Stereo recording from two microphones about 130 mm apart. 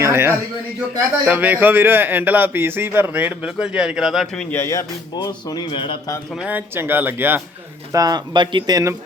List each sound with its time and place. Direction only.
0.0 s a man's voice: 20° right (ahead or behind); by 4.4 s centre (ahead or behind)
4.5 s a man's voice: 25° left (ahead or behind); by 6.0 s 40° left (ahead or behind)
6.3 s a man's voice: 10° right (ahead or behind)
7.9 s speech: 30° right (ahead or behind)